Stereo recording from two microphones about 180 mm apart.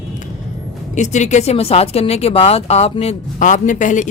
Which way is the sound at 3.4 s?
45° left (ahead or behind).